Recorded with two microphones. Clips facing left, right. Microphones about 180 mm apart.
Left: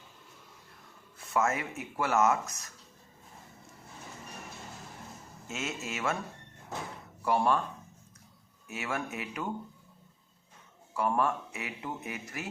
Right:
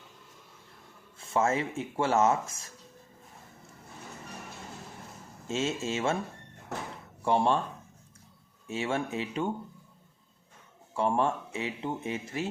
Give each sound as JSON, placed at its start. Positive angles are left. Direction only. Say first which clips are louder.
{"t": 1.2, "sound": "speech", "louder": "right 3 dB", "side_deg": -30}
{"t": 5.5, "sound": "speech", "louder": "right 7 dB", "side_deg": -30}
{"t": 7.2, "sound": "speech", "louder": "right 2 dB", "side_deg": -25}
{"t": 8.6, "sound": "speech", "louder": "right 5 dB", "side_deg": -30}
{"t": 10.9, "sound": "speech", "louder": "right 2 dB", "side_deg": -25}